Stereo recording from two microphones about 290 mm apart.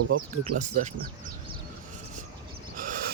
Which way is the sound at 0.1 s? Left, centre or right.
Right.